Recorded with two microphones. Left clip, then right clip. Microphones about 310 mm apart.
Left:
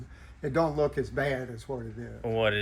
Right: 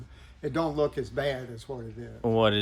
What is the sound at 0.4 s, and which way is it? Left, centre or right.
Speech, centre.